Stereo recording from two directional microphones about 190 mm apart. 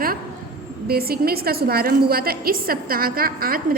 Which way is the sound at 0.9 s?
55° right (ahead or behind).